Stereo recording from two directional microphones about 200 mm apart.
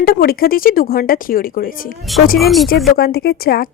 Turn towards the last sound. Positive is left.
turn(degrees=50)  # may be behind; listen again after turning